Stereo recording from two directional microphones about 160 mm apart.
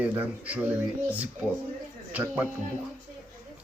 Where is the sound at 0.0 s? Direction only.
10° right (ahead or behind).